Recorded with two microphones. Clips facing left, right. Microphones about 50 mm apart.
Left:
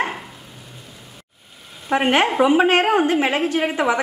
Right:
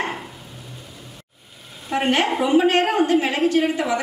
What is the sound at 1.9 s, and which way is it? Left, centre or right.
A woman's voice, centre.